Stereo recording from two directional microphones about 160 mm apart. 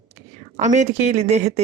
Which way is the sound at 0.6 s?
45° right (ahead or behind).